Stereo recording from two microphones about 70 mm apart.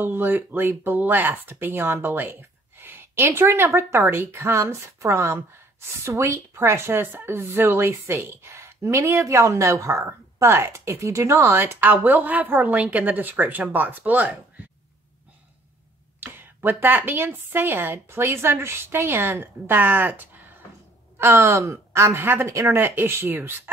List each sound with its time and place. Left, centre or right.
0.0 s a woman's voice: right
16.2 s a woman's voice: right